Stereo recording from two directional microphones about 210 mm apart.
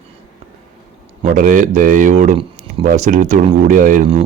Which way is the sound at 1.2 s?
40° right (ahead or behind).